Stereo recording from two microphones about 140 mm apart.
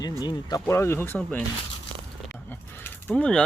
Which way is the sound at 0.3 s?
30° left (ahead or behind).